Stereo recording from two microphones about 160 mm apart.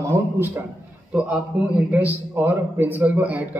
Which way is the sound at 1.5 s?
5° right (ahead or behind).